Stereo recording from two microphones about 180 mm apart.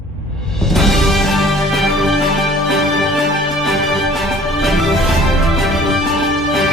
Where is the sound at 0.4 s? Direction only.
Centre (ahead or behind).